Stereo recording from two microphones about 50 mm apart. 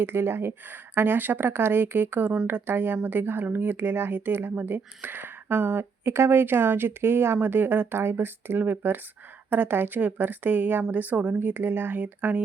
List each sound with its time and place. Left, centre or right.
0.0 s speech: right
7.4 s a woman's voice: right
11.3 s speech: right